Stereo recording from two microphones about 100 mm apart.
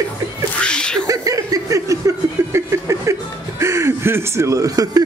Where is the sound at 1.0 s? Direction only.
35° right (ahead or behind).